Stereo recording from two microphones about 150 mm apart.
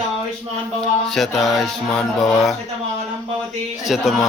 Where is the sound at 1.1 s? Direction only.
Centre (ahead or behind).